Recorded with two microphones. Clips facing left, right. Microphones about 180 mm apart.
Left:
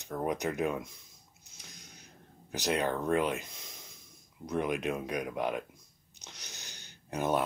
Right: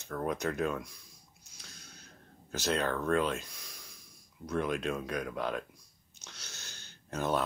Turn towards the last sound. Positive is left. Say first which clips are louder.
# left 2 dB
turn(degrees=15)  # may be behind; listen again after turning